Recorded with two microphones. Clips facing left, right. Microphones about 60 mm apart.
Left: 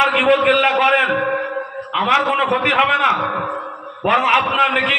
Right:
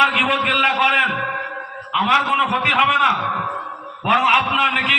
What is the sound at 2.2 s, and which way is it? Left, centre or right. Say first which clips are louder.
Speech: left 1 dB; centre.